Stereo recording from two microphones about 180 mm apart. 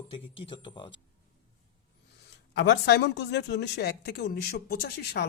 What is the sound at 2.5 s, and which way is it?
Speech, 70° left (ahead or behind).